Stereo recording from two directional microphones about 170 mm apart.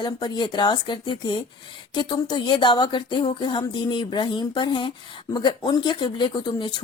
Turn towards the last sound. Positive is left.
turn(degrees=25)  # may be behind; listen again after turning